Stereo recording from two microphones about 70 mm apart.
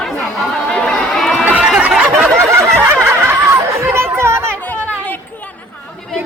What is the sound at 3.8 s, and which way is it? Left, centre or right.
Chatter, right.